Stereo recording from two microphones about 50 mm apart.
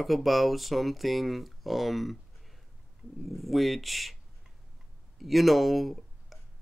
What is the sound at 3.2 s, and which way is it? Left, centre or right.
Speech, centre.